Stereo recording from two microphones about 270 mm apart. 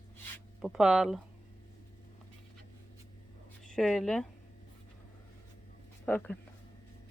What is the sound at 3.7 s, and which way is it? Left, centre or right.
Speech, centre.